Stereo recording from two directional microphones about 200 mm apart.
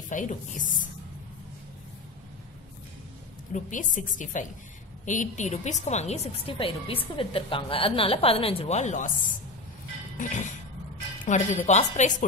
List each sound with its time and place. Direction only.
0.1 s a woman's voice: 40° left (ahead or behind)
3.5 s a woman's voice: 40° left (ahead or behind)
10.1 s a woman's voice: 40° left (ahead or behind)